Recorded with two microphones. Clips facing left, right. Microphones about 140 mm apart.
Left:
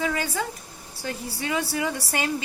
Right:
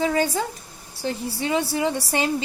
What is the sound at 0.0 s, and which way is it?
A woman's voice, 30° right (ahead or behind).